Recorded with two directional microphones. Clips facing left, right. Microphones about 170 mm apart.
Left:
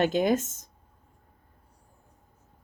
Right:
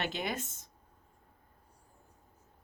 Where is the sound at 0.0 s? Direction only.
40° left (ahead or behind).